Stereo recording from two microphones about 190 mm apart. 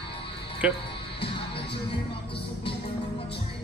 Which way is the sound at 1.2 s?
25° left (ahead or behind).